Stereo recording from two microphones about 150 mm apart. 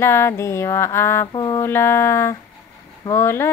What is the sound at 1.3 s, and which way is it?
Music, 30° left (ahead or behind).